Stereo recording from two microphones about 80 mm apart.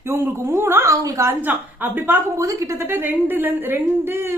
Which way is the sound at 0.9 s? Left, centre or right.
Right.